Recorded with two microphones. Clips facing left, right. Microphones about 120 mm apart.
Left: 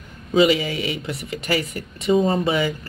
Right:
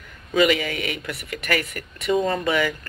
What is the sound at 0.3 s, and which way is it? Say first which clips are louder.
A man's voice: left 2 dB; 30° left (ahead or behind).